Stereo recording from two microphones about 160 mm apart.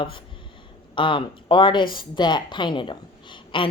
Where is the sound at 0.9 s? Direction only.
30° left (ahead or behind).